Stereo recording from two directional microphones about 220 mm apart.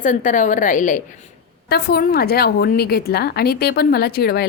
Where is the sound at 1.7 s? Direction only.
45° left (ahead or behind).